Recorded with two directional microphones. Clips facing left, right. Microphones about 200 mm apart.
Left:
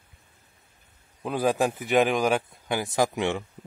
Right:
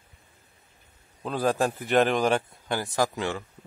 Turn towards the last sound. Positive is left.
turn(degrees=20)  # may be behind; listen again after turning